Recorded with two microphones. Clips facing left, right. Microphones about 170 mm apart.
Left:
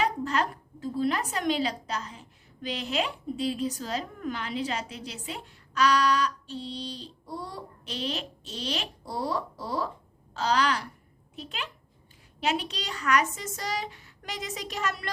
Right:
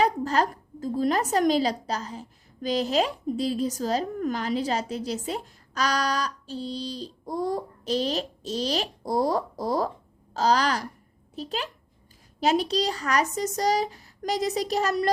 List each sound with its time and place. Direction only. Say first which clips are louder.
0.0 s a woman's voice: right 4 dB; 35° right (ahead or behind)